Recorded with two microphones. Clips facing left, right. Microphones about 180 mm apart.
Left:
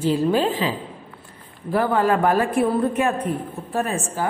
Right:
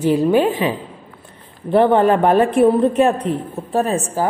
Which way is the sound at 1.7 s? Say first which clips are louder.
Right 6 dB; 25° right (ahead or behind).